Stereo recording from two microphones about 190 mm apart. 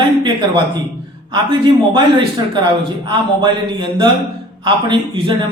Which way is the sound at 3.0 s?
25° right (ahead or behind).